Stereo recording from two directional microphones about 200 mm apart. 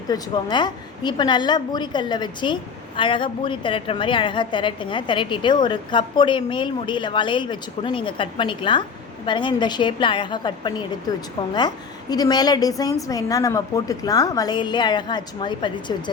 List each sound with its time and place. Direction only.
0.1 s a woman's voice: 20° left (ahead or behind)